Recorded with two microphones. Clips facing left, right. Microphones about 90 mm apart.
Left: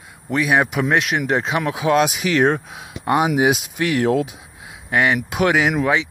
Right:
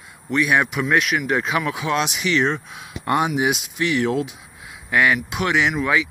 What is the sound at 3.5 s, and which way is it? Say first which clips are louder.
Speech: left 3 dB; 45° left (ahead or behind).